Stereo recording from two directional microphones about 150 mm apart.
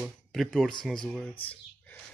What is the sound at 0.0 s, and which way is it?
Speech, centre (ahead or behind).